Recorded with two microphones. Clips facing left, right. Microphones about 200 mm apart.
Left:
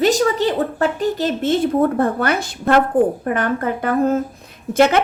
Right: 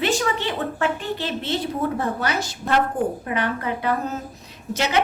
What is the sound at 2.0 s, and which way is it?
A woman's voice, 55° left (ahead or behind).